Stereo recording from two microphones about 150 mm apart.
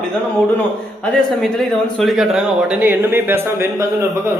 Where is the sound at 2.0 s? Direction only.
Centre (ahead or behind).